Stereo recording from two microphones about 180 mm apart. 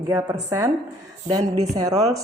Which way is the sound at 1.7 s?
20° right (ahead or behind).